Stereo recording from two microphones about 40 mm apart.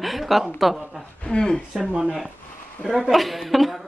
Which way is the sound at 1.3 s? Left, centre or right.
Centre.